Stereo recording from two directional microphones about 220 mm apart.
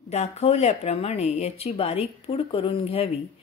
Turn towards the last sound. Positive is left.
turn(degrees=25)  # may be behind; listen again after turning